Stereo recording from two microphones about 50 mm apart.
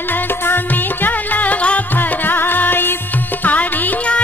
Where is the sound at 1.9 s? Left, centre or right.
Left.